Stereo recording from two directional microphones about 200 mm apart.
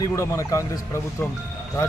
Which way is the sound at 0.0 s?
15° left (ahead or behind).